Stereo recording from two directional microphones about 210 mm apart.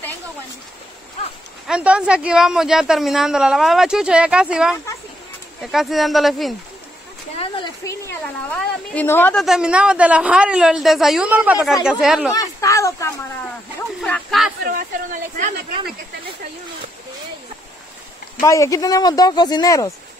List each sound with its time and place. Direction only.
1.7 s a woman's voice: 5° right (ahead or behind)
7.3 s a woman's voice: 20° left (ahead or behind); by 12.3 s 5° right (ahead or behind)
12.3 s speech: 15° left (ahead or behind)
14.0 s a woman's voice: 5° left (ahead or behind)
14.6 s speech: 40° right (ahead or behind)
18.4 s speech: 15° left (ahead or behind)